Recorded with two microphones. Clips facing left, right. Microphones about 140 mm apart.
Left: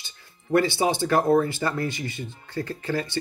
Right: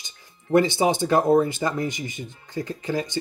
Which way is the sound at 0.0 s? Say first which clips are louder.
Right 1 dB; 20° right (ahead or behind).